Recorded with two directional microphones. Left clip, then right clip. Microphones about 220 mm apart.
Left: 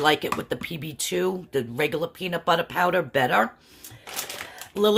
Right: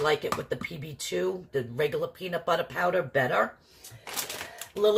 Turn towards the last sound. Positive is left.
turn(degrees=45)  # may be behind; listen again after turning